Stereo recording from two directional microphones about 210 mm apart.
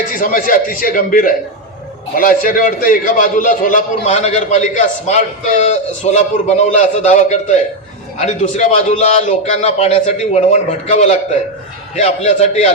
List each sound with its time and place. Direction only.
0.2 s a man's voice: 40° left (ahead or behind)